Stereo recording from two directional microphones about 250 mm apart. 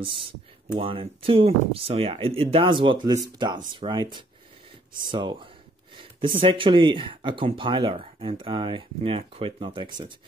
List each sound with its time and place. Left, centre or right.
0.7 s speech: right